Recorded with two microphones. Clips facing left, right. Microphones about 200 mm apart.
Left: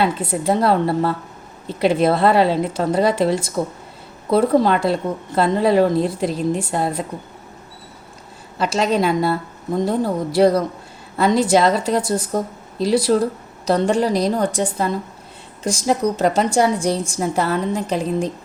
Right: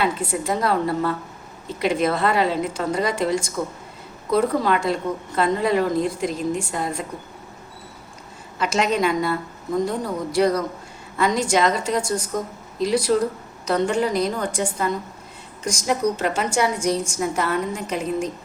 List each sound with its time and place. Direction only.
0.0 s a woman's voice: 35° left (ahead or behind)
8.5 s a woman's voice: 35° left (ahead or behind)